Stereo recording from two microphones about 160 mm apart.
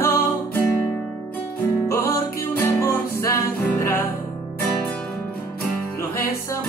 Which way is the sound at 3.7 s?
20° left (ahead or behind).